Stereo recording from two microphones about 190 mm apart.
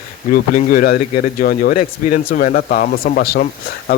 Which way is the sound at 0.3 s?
45° left (ahead or behind).